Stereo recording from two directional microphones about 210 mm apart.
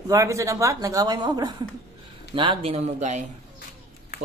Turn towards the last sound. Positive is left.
turn(degrees=-35)  # may be behind; listen again after turning